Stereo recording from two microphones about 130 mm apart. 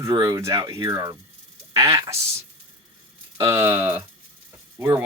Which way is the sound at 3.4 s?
20° right (ahead or behind).